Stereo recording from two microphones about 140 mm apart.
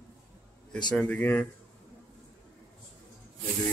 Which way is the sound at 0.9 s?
10° left (ahead or behind).